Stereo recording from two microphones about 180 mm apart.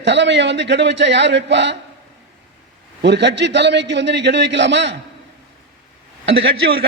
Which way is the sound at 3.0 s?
75° right (ahead or behind).